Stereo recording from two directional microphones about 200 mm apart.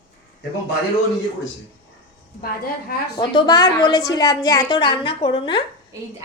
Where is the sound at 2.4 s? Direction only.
45° left (ahead or behind).